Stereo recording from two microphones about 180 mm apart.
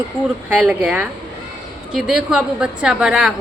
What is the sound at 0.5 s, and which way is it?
A woman's voice, 5° right (ahead or behind).